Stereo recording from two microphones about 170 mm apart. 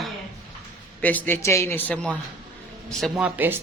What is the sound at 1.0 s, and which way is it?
Speech, 10° left (ahead or behind).